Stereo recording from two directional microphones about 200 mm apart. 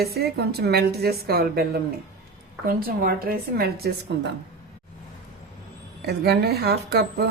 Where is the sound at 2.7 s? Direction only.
50° right (ahead or behind).